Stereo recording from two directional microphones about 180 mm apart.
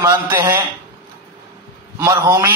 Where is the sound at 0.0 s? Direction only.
15° right (ahead or behind).